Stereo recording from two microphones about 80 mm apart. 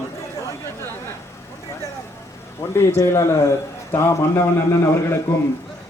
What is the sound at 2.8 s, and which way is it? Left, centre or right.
A man's voice, left.